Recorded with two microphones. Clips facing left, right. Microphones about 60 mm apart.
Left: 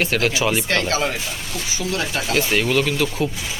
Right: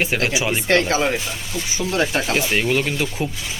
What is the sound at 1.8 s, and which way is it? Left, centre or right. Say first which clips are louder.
Speech: right 4 dB; right.